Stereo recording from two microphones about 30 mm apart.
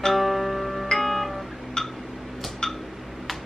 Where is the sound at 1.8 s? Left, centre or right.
Left.